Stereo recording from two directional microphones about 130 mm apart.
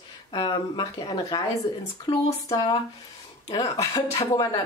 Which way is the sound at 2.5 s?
35° left (ahead or behind).